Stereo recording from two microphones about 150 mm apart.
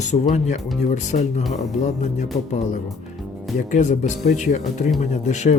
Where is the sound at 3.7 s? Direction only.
55° left (ahead or behind).